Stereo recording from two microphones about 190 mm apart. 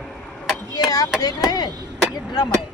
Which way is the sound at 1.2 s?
20° left (ahead or behind).